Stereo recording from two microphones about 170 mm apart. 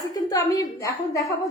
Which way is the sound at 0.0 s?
20° left (ahead or behind).